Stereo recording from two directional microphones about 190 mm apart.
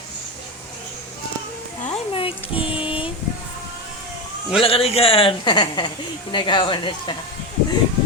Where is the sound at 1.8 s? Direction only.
30° left (ahead or behind).